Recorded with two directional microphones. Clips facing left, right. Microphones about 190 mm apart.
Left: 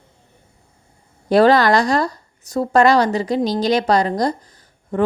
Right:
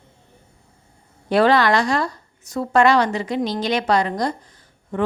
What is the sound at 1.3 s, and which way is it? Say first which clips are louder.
A woman's voice: left 3 dB; 40° left (ahead or behind).